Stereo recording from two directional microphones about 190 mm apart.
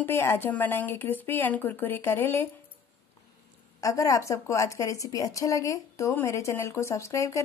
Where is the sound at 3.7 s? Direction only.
20° left (ahead or behind).